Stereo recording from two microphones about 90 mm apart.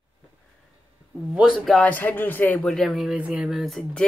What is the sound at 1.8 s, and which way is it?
Speech, 20° left (ahead or behind).